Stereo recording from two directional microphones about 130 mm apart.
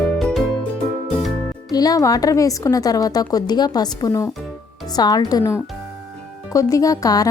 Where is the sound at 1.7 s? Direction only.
30° left (ahead or behind).